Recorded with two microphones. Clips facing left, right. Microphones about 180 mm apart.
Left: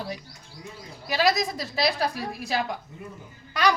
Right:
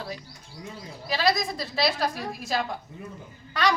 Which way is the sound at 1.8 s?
10° left (ahead or behind).